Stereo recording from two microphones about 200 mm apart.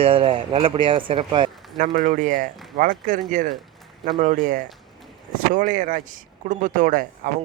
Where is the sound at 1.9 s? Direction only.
40° right (ahead or behind).